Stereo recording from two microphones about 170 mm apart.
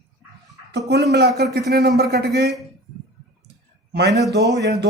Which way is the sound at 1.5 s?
80° right.